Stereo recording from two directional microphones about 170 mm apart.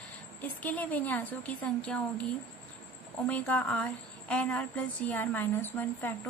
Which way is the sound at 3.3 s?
10° left (ahead or behind).